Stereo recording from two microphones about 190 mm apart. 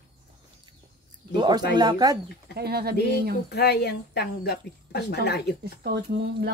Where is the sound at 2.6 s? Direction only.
55° right (ahead or behind).